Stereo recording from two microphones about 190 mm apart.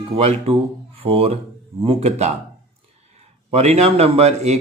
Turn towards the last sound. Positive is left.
turn(degrees=-35)  # may be behind; listen again after turning